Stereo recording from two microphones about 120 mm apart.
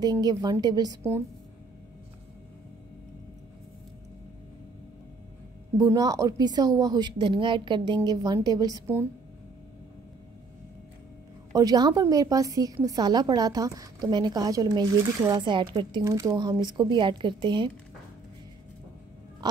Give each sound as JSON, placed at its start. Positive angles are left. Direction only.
{"t": 0.0, "sound": "a woman's voice", "side_deg": -35}
{"t": 5.9, "sound": "a woman's voice", "side_deg": -30}
{"t": 11.5, "sound": "a woman's voice", "side_deg": -35}
{"t": 16.0, "sound": "a woman's voice", "side_deg": -30}